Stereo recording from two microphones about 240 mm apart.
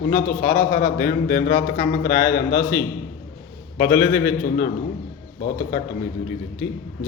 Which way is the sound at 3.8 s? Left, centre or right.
Left.